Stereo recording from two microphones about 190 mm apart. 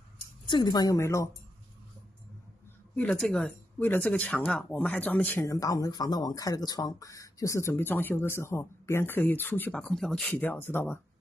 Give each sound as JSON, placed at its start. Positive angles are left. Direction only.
{"t": 0.5, "sound": "a woman's voice", "side_deg": 20}
{"t": 3.0, "sound": "speech", "side_deg": 5}